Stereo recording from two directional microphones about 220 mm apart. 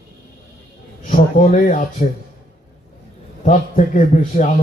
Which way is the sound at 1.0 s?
35° left (ahead or behind).